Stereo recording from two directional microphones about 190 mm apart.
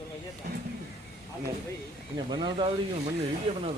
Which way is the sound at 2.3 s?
25° right (ahead or behind).